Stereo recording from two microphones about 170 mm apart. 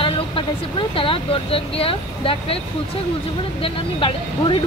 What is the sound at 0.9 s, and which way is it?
Speech, 30° left (ahead or behind).